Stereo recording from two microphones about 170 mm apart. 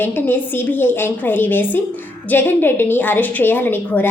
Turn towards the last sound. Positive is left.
turn(degrees=10)  # may be behind; listen again after turning